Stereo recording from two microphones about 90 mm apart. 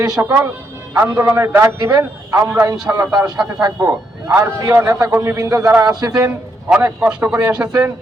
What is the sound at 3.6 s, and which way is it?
Speech, 30° right (ahead or behind).